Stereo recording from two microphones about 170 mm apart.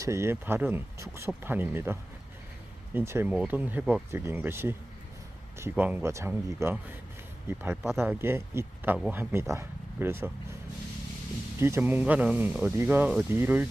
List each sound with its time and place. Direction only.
0.0 s speech: 15° right (ahead or behind)
11.6 s speech: 15° right (ahead or behind)